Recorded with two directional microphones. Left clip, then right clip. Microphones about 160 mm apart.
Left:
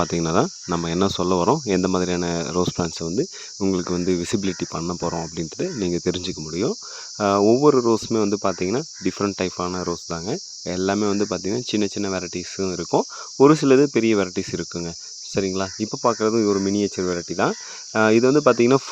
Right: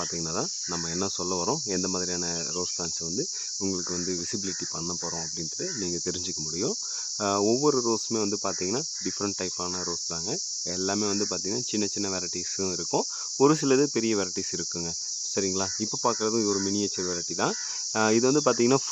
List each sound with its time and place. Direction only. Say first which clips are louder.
0.0 s speech: left 10 dB; 60° left (ahead or behind); by 18.8 s 35° left (ahead or behind)